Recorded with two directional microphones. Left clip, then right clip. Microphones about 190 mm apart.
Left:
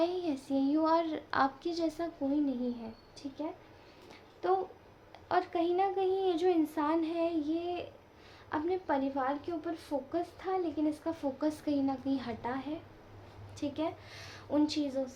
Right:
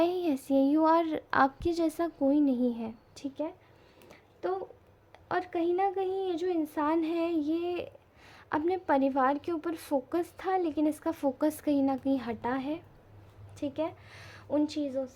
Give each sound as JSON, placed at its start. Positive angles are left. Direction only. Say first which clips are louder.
{"t": 0.0, "sound": "child singing", "louder": "right 4 dB", "side_deg": -45}
{"t": 4.1, "sound": "a sound", "louder": "left 2 dB", "side_deg": -30}
{"t": 5.3, "sound": "a woman's voice", "louder": "even", "side_deg": -35}
{"t": 6.7, "sound": "a woman's voice", "louder": "right 2 dB", "side_deg": -35}